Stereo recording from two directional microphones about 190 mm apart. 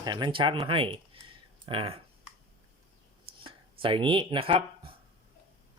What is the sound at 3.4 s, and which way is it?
Speech, 25° right (ahead or behind).